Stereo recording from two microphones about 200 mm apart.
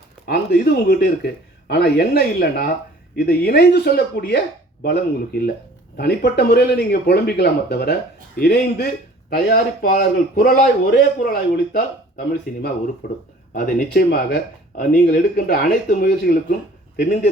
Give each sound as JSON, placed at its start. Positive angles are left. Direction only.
{"t": 0.3, "sound": "a man's voice", "side_deg": 50}